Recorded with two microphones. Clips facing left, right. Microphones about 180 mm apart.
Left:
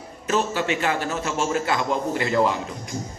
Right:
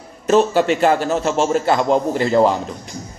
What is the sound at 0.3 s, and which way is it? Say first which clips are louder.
A man's voice: right 9 dB; 35° right (ahead or behind).